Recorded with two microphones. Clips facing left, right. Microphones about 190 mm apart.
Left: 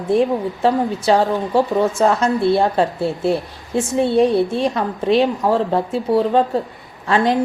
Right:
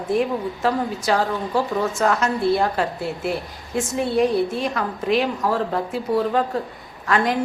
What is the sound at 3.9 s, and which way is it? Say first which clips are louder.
A woman's voice: left 5 dB; 30° left (ahead or behind).